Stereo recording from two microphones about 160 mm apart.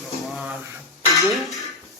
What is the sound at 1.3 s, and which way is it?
Speech, centre (ahead or behind).